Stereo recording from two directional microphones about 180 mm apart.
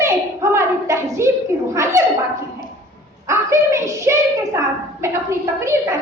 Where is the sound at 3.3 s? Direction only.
15° right (ahead or behind).